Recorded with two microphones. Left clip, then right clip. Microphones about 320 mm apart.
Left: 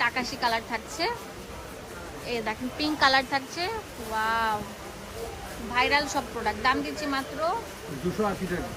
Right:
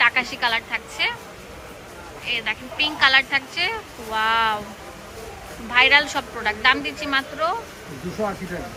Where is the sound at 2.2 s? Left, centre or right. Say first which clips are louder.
Right 6 dB; centre.